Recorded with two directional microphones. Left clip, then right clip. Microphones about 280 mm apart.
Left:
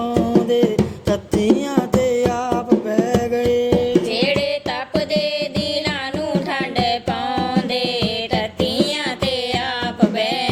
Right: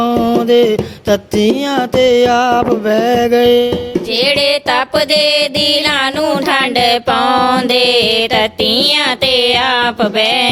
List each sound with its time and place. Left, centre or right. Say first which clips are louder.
0.3 s music: right 7 dB; right
2.3 s music: right 8 dB; right
3.3 s music: right 9 dB; right
4.2 s music: right 7 dB; right
6.5 s music: right 9 dB; right